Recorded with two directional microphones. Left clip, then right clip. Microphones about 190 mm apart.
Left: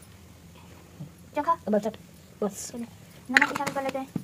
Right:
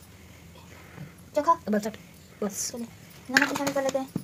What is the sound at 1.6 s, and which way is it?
Speech, 30° left (ahead or behind).